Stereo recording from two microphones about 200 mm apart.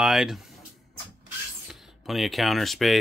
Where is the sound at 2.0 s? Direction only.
Centre (ahead or behind).